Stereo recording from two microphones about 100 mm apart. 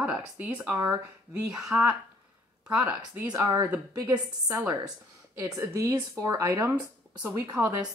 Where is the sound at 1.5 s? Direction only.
5° right (ahead or behind).